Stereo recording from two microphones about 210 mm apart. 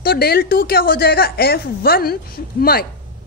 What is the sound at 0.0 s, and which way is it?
A woman's voice, 45° left (ahead or behind).